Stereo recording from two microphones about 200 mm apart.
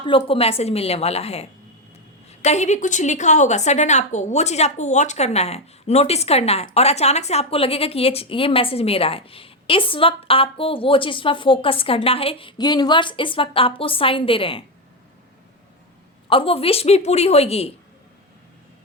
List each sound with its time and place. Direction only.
0.0 s a woman's voice: 25° left (ahead or behind)
16.3 s a woman's voice: 25° left (ahead or behind)